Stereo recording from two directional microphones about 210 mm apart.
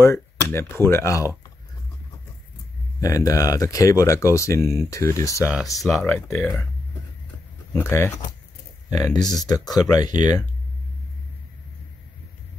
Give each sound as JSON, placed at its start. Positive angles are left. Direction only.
{"t": 0.0, "sound": "speech", "side_deg": 10}
{"t": 3.0, "sound": "speech", "side_deg": 15}
{"t": 5.4, "sound": "speech", "side_deg": -5}
{"t": 7.7, "sound": "speech", "side_deg": 10}